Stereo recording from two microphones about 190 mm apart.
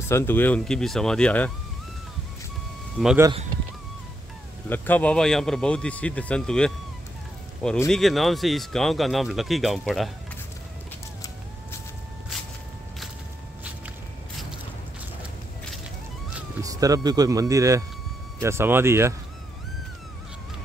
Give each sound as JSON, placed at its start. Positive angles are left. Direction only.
{"t": 0.1, "sound": "speech", "side_deg": 10}
{"t": 3.0, "sound": "speech", "side_deg": -5}
{"t": 4.6, "sound": "speech", "side_deg": 10}
{"t": 16.6, "sound": "speech", "side_deg": -20}